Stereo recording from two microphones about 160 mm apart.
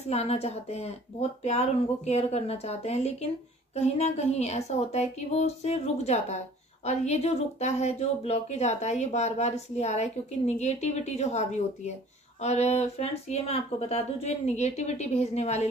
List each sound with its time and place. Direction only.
0.1 s a woman's voice: 40° left (ahead or behind)